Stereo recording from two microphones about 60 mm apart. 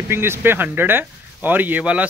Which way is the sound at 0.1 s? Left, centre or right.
Right.